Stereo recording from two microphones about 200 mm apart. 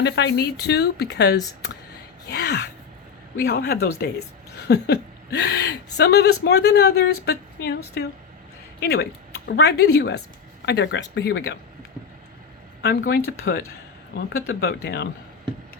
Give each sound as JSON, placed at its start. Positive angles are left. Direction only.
{"t": 0.0, "sound": "speech", "side_deg": 60}
{"t": 2.2, "sound": "gasp", "side_deg": 55}
{"t": 3.3, "sound": "speech", "side_deg": 50}
{"t": 8.8, "sound": "speech", "side_deg": 55}
{"t": 12.8, "sound": "speech", "side_deg": 50}